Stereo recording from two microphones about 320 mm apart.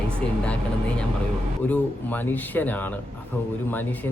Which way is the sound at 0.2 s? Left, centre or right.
Centre.